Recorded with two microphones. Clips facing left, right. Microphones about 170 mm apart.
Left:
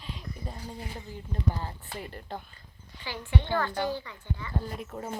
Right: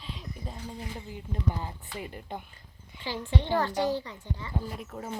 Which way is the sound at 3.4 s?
30° right (ahead or behind).